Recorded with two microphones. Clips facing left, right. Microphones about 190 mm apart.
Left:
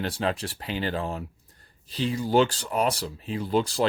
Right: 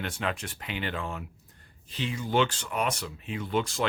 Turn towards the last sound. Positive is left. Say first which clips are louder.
# left 5 dB
turn(degrees=35)  # may be behind; listen again after turning